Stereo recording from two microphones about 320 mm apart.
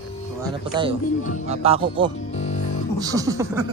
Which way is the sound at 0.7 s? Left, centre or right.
Centre.